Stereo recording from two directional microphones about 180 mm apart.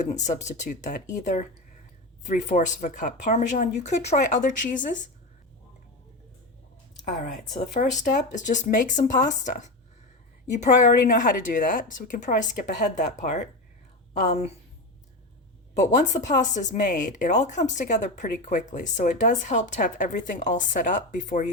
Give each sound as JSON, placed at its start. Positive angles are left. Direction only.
{"t": 0.2, "sound": "speech", "side_deg": 40}
{"t": 7.0, "sound": "a woman's voice", "side_deg": 45}
{"t": 15.8, "sound": "speech", "side_deg": 40}